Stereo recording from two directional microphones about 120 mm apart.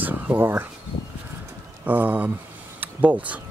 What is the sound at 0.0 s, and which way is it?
Speech, 15° right (ahead or behind).